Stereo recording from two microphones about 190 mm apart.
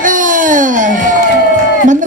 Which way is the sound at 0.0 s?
45° right (ahead or behind).